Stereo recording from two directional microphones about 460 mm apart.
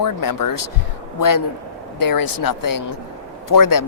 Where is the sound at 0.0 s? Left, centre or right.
Left.